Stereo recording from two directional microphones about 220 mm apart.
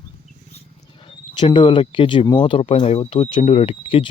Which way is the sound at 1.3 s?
20° left (ahead or behind).